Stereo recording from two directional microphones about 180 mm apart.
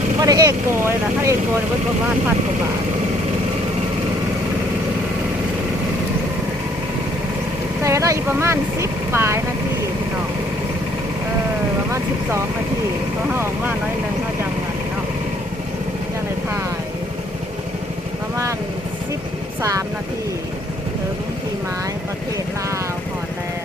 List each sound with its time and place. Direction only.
0.2 s speech: 20° right (ahead or behind)
7.9 s speech: 15° right (ahead or behind)
13.3 s speech: 10° right (ahead or behind)